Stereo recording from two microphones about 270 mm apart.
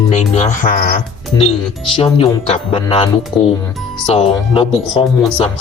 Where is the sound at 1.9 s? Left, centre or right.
Left.